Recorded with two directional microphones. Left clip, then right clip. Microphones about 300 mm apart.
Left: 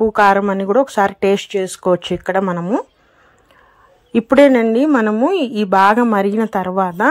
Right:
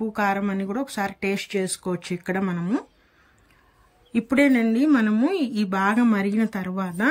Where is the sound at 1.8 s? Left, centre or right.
Left.